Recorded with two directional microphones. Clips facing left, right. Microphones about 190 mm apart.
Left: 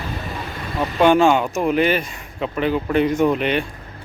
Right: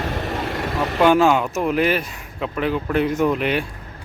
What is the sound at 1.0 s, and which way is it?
Speech, 5° right (ahead or behind).